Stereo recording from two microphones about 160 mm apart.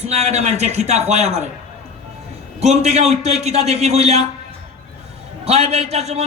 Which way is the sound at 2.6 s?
45° right (ahead or behind).